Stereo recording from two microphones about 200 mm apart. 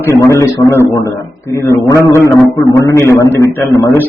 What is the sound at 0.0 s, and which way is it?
A man's voice, 15° left (ahead or behind).